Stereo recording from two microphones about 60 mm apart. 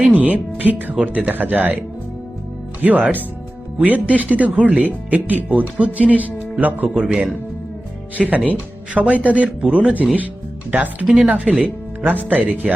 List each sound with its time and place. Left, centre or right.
0.1 s speech: right
2.8 s speech: right
11.1 s speech: centre